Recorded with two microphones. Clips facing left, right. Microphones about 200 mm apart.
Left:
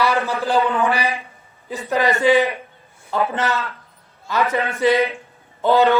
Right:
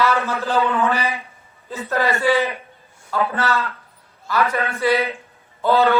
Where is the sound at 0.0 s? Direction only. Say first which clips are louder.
Even; 15° left (ahead or behind).